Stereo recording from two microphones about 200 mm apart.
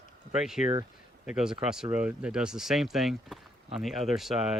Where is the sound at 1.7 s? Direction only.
5° right (ahead or behind).